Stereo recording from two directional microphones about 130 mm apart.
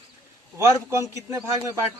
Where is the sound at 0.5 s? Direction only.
20° right (ahead or behind).